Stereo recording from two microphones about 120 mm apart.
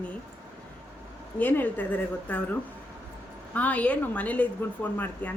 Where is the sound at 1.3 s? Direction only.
15° left (ahead or behind).